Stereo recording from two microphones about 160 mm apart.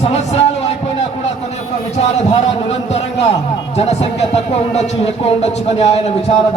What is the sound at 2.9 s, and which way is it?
Speech, 40° left (ahead or behind).